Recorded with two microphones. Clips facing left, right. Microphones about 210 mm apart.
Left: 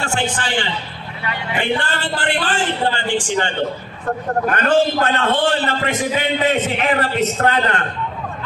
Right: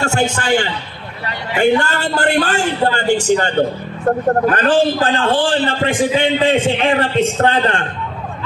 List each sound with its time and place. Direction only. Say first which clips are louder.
0.0 s a man's voice: right 5 dB; 45° right (ahead or behind)